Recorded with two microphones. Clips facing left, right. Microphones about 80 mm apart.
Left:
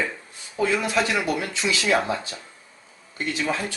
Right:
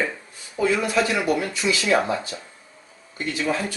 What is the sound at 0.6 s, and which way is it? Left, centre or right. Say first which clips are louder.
Speech: right 2 dB; right.